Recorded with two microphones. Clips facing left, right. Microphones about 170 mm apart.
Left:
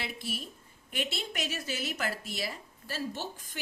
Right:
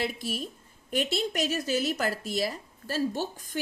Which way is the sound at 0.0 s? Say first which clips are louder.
Right 7 dB; 40° right (ahead or behind).